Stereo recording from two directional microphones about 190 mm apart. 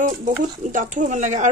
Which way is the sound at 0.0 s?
40° right (ahead or behind).